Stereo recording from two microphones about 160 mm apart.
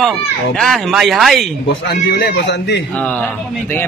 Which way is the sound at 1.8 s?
90° left.